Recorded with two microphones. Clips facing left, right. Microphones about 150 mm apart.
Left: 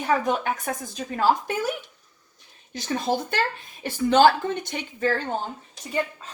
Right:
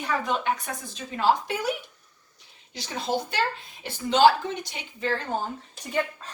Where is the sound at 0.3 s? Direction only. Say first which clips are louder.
Left 2 dB; 45° left (ahead or behind).